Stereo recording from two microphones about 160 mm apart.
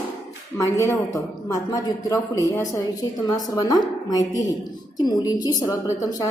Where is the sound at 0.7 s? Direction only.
20° left (ahead or behind).